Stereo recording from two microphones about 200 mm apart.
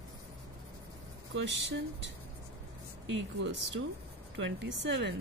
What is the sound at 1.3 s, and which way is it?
Speech, 60° right (ahead or behind).